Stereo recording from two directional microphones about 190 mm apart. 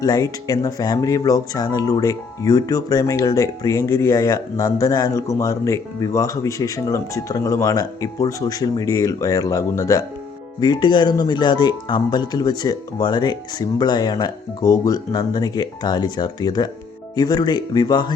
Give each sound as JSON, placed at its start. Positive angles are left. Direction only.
{"t": 0.0, "sound": "speech", "side_deg": 20}